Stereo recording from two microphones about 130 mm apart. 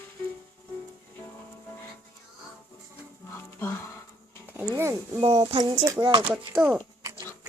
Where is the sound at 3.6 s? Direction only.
15° left (ahead or behind).